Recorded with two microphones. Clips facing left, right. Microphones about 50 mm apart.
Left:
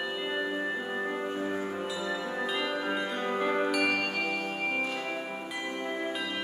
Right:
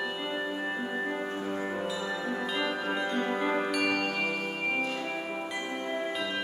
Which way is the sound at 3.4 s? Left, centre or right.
Centre.